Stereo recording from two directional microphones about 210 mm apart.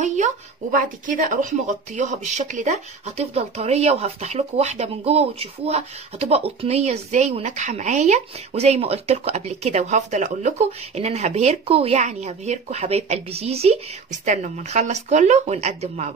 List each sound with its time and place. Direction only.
0.0 s speech: 35° right (ahead or behind)